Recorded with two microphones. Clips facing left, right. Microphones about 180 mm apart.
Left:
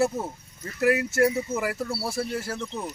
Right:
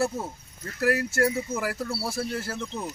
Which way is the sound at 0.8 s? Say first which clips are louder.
Left 2 dB; 20° left (ahead or behind).